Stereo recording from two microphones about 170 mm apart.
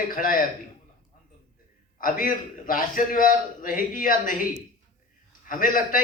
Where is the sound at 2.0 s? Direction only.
55° left (ahead or behind).